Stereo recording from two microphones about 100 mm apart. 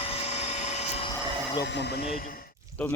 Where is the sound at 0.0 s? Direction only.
90° left.